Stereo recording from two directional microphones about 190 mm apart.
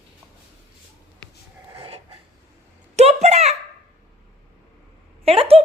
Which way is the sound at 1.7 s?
30° right (ahead or behind).